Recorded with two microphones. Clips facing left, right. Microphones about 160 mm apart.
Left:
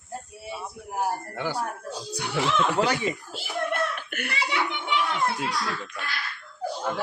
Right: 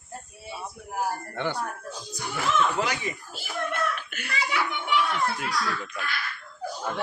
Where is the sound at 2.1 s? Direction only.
70° left (ahead or behind).